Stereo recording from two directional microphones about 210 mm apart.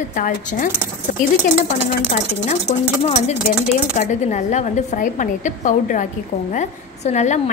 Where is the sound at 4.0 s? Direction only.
35° left (ahead or behind).